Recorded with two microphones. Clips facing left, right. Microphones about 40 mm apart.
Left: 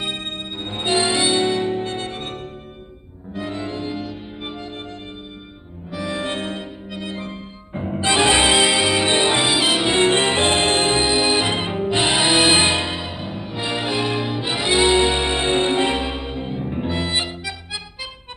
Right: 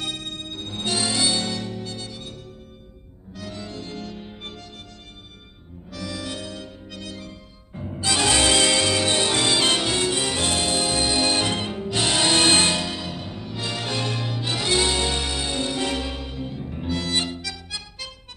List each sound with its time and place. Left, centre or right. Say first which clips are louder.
0.0 s music: left 4 dB; left
3.3 s music: left 8 dB; left
5.9 s music: left 7 dB; left
9.8 s music: left 7 dB; left